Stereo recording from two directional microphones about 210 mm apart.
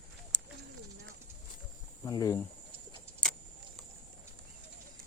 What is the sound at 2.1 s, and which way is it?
Speech, 15° left (ahead or behind).